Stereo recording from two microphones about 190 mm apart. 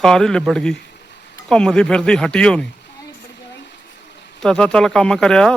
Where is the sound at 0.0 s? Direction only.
5° left (ahead or behind).